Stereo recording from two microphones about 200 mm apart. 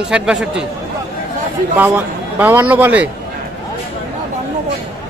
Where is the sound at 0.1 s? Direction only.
5° right (ahead or behind).